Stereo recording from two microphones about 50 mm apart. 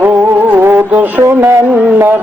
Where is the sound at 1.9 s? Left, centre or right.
Right.